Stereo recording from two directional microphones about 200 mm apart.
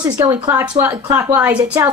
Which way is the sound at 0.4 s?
10° right (ahead or behind).